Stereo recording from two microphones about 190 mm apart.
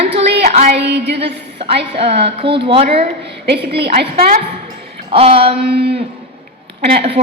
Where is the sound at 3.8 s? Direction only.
30° right (ahead or behind).